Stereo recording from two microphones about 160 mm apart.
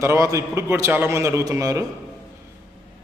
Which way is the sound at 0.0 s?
15° right (ahead or behind).